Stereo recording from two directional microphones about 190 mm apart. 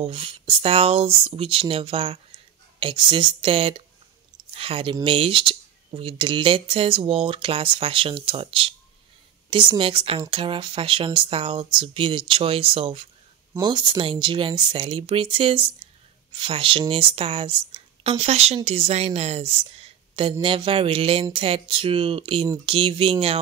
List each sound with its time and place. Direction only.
0.0 s a woman's voice: 30° right (ahead or behind)